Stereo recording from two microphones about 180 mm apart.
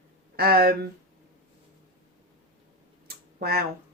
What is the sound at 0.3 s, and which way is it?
Speech, 60° right (ahead or behind).